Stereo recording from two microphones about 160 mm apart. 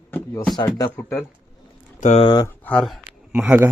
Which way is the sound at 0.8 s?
15° left (ahead or behind).